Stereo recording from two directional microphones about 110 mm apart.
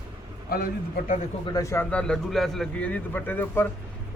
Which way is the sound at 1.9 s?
10° left (ahead or behind).